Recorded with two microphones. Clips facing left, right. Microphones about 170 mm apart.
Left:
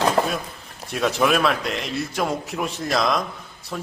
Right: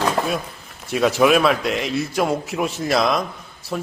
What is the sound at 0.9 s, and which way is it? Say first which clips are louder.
A man's voice: right 4 dB; centre (ahead or behind).